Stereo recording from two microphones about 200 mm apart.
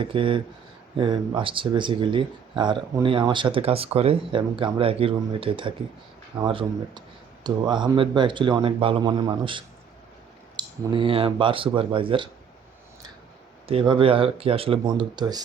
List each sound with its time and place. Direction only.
0.0 s speech: 25° right (ahead or behind)
13.7 s speech: 25° right (ahead or behind)